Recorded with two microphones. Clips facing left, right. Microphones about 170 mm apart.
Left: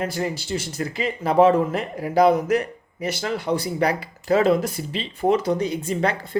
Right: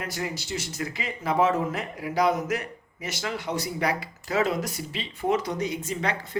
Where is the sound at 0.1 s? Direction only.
30° left (ahead or behind).